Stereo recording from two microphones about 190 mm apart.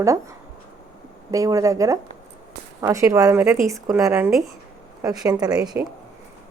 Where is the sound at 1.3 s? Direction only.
15° right (ahead or behind).